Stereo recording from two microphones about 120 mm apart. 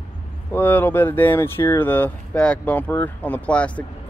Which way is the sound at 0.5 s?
15° left (ahead or behind).